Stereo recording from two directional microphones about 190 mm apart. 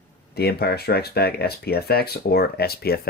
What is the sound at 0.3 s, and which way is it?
Speech, 55° left (ahead or behind).